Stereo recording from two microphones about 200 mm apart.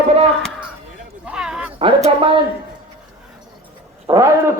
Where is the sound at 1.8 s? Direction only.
25° right (ahead or behind).